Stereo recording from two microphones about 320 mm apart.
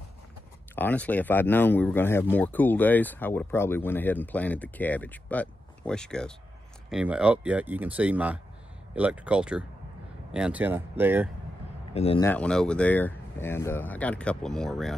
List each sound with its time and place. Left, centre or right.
0.7 s speech: centre
11.9 s speech: centre
12.3 s speech: centre